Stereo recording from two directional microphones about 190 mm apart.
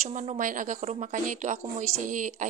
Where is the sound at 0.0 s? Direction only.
40° right (ahead or behind).